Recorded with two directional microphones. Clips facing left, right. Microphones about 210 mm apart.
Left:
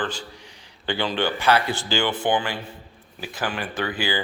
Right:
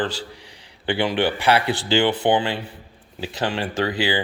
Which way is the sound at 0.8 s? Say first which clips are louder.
Right 3 dB; 15° right (ahead or behind).